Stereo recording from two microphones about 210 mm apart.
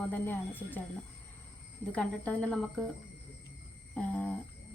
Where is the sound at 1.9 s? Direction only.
5° left (ahead or behind).